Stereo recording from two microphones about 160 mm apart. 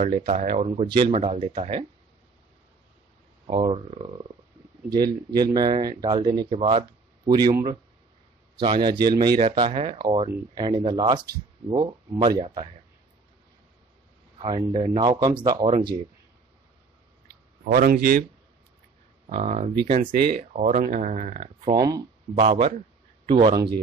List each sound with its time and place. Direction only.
0.0 s speech: 50° right (ahead or behind)
3.4 s speech: 30° right (ahead or behind)
6.5 s speech: 40° right (ahead or behind)
7.2 s speech: 25° right (ahead or behind)
14.4 s speech: 35° right (ahead or behind)
15.0 s speech: 25° right (ahead or behind)
17.6 s a man's voice: 65° right (ahead or behind)
19.3 s speech: 40° right (ahead or behind)
20.3 s speech: 50° right (ahead or behind)
21.7 s speech: 20° right (ahead or behind)